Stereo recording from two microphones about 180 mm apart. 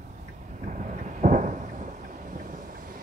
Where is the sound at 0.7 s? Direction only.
45° right (ahead or behind).